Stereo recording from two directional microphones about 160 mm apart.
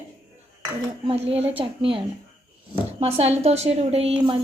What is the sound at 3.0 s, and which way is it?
A woman's voice, 40° right (ahead or behind).